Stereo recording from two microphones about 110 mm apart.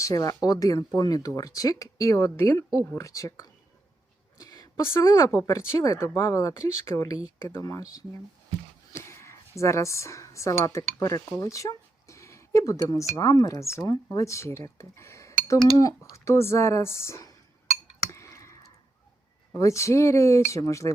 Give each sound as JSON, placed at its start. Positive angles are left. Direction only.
{"t": 0.0, "sound": "speech", "side_deg": 30}
{"t": 4.4, "sound": "a sound", "side_deg": 35}
{"t": 5.1, "sound": "speech", "side_deg": 30}
{"t": 9.0, "sound": "speech", "side_deg": 25}
{"t": 18.1, "sound": "clicking", "side_deg": 25}
{"t": 19.5, "sound": "speech", "side_deg": 30}